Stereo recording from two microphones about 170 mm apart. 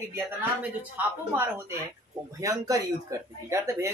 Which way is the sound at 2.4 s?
20° right (ahead or behind).